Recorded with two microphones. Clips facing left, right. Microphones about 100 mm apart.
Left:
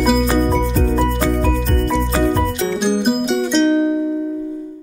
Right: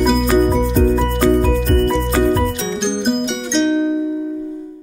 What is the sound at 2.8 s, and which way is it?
Music, 5° left (ahead or behind).